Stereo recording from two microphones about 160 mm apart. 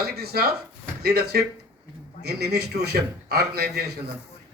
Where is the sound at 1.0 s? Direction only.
90° right.